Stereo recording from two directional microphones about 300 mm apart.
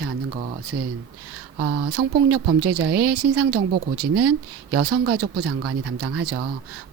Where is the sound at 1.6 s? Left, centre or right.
Right.